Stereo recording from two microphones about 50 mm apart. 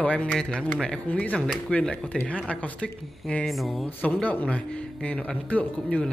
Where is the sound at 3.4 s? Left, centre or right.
Centre.